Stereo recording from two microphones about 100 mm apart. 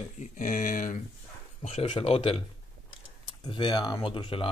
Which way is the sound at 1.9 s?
75° left (ahead or behind).